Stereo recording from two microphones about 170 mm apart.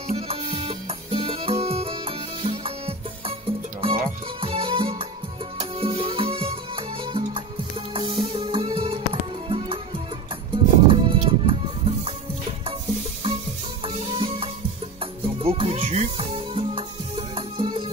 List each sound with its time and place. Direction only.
0.1 s music: 35° right (ahead or behind)
13.8 s music: 35° right (ahead or behind)